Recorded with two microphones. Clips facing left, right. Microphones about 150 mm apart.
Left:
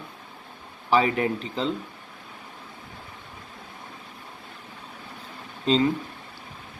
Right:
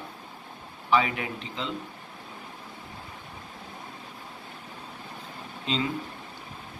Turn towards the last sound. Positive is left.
turn(degrees=40)  # may be behind; listen again after turning